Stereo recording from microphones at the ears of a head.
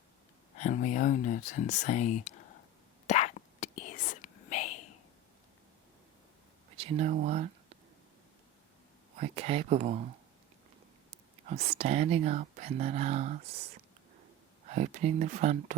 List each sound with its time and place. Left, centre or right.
0.5 s speech: left
3.1 s whispering: left
6.7 s a sound: right
9.1 s speech: right